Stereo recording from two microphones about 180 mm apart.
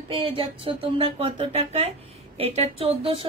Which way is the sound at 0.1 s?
30° right (ahead or behind).